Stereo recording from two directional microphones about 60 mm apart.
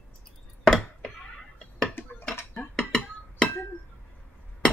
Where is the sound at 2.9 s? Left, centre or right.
Centre.